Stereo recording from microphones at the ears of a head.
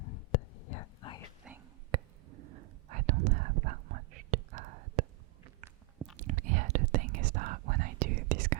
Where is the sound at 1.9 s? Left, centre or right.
Right.